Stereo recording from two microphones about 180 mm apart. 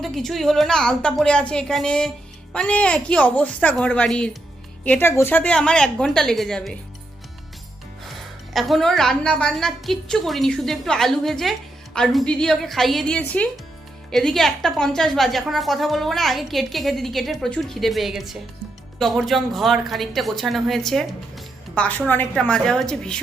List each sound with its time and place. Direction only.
0.0 s a woman's voice: centre (ahead or behind)
8.5 s a woman's voice: centre (ahead or behind)